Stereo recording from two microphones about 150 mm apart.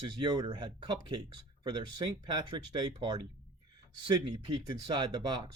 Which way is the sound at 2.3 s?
30° right (ahead or behind).